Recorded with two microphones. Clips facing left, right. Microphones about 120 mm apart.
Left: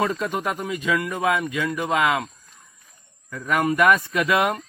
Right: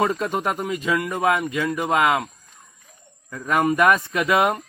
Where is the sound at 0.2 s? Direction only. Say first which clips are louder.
Right 2 dB; 40° right (ahead or behind).